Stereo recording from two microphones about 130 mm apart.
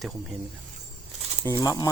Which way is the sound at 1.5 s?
25° left (ahead or behind).